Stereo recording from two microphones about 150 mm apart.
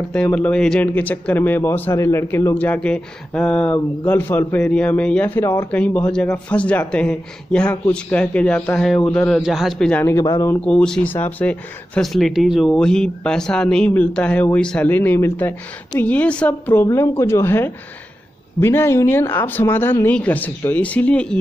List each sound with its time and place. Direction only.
0.1 s a man's voice: 10° left (ahead or behind)
10.1 s speech: 20° left (ahead or behind)
10.6 s speech: 5° left (ahead or behind)